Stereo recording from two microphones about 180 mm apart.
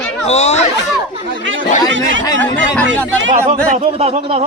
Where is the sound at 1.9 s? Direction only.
90° right.